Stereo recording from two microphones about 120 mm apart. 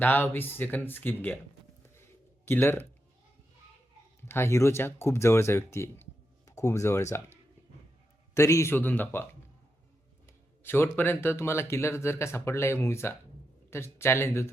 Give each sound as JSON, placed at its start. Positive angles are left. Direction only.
{"t": 0.0, "sound": "speech", "side_deg": 15}
{"t": 2.0, "sound": "a sound", "side_deg": 20}
{"t": 4.2, "sound": "speech", "side_deg": 20}
{"t": 8.4, "sound": "speech", "side_deg": 25}
{"t": 10.6, "sound": "speech", "side_deg": 20}